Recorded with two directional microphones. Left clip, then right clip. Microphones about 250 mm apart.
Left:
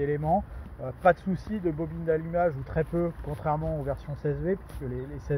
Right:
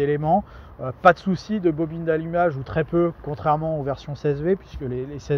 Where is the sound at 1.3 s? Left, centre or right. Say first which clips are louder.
Right 8 dB; right.